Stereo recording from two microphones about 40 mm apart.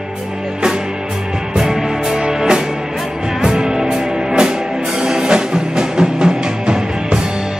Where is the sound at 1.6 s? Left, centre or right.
Centre.